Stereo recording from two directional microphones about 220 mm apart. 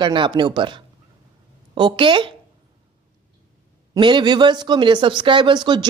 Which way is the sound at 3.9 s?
20° right (ahead or behind).